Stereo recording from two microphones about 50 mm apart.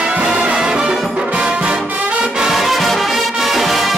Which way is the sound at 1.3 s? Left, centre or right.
Right.